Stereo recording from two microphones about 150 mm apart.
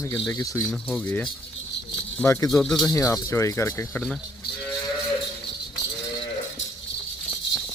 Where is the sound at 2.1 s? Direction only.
15° left (ahead or behind).